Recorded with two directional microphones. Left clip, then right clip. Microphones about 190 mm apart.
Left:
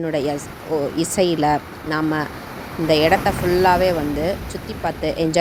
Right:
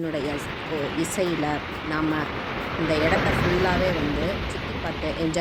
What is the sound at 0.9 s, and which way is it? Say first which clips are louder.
Speech: left 6 dB; 40° left (ahead or behind).